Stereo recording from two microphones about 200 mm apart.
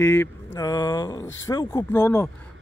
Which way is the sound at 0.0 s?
15° left (ahead or behind).